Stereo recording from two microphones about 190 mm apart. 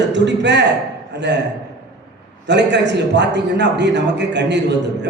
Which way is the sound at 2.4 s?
65° right (ahead or behind).